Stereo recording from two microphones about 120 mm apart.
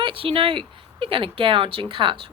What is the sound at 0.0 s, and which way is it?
A woman's voice, 50° right (ahead or behind).